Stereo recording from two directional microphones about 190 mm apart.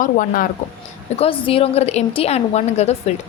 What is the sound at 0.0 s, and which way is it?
Speech, 45° left (ahead or behind).